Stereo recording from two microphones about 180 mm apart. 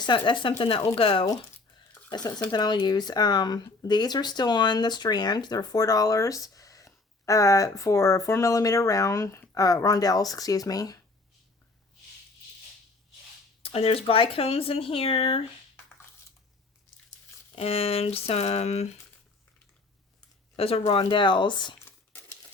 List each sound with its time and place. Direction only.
0.0 s speech: 25° left (ahead or behind)
13.6 s speech: 35° left (ahead or behind)
17.5 s speech: 35° left (ahead or behind)
20.6 s speech: 35° left (ahead or behind)